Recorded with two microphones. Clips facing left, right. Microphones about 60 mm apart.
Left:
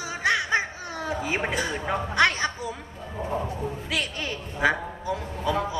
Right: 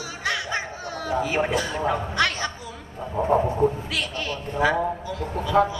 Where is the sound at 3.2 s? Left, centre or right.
Right.